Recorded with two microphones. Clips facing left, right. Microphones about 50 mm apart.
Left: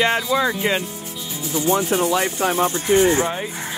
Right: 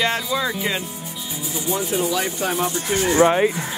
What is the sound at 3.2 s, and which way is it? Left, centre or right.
Speech, right.